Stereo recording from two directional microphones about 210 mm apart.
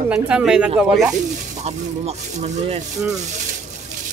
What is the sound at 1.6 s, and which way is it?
Speech, 30° right (ahead or behind).